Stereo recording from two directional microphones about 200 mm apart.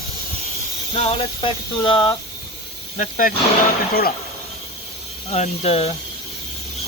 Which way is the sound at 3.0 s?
40° left (ahead or behind).